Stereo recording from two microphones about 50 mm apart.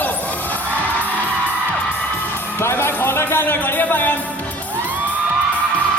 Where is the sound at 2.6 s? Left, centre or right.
Left.